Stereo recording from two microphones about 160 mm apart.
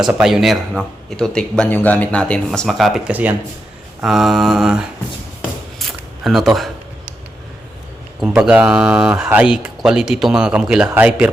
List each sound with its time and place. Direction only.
0.0 s speech: 5° right (ahead or behind)
5.8 s a sound: centre (ahead or behind)
8.2 s speech: 5° right (ahead or behind)